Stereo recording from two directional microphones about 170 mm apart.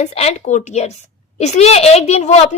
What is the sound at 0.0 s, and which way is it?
A woman's voice, 40° left (ahead or behind).